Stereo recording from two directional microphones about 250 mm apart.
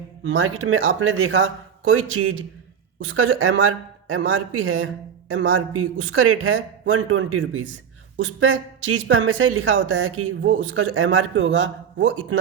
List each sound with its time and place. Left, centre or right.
0.2 s speech: right
3.1 s speech: right